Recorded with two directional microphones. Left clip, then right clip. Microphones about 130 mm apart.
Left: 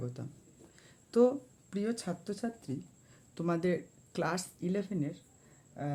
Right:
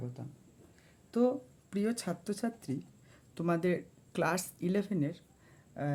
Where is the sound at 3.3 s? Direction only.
15° right (ahead or behind).